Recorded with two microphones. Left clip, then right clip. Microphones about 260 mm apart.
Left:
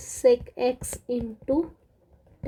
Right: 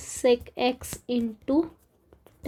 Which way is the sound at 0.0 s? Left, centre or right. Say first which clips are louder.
Left 2 dB; centre.